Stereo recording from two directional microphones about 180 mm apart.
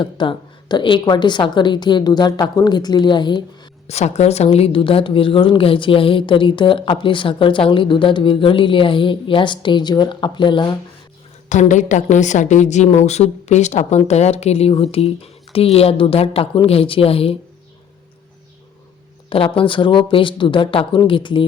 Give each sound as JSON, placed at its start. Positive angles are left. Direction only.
{"t": 0.0, "sound": "speech", "side_deg": 25}
{"t": 3.8, "sound": "speech", "side_deg": 35}
{"t": 11.4, "sound": "a woman's voice", "side_deg": 40}
{"t": 19.3, "sound": "speech", "side_deg": 30}